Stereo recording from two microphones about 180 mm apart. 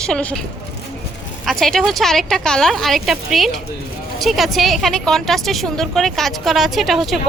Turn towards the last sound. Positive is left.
turn(degrees=0)  # may be behind; listen again after turning